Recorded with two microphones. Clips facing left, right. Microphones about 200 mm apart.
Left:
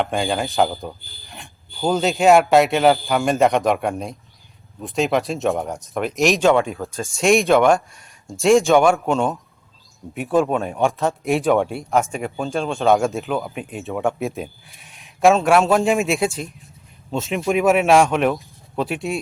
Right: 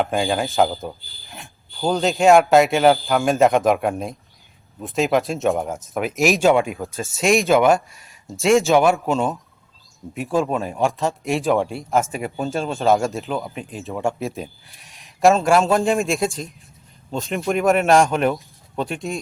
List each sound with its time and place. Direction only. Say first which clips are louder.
0.0 s speech: right 1 dB; centre (ahead or behind)